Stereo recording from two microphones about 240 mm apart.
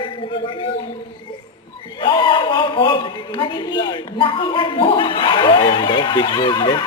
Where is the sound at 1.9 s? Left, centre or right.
Centre.